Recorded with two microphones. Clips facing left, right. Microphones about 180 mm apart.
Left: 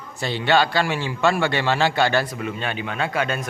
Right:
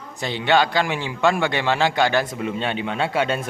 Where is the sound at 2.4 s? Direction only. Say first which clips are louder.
Right 3 dB; 25° right (ahead or behind).